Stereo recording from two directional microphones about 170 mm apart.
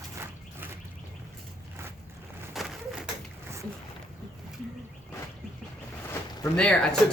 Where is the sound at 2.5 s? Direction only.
Centre (ahead or behind).